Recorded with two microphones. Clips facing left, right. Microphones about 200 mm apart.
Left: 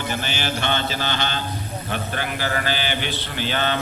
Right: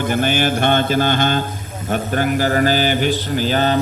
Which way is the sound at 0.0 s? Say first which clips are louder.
Right 9 dB; 50° right (ahead or behind).